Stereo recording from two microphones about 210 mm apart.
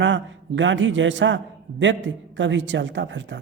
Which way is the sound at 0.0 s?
60° right (ahead or behind).